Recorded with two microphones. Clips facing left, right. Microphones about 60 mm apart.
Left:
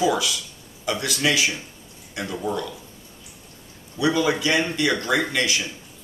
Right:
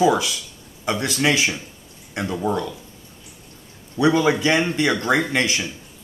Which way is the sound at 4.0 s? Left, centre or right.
Right.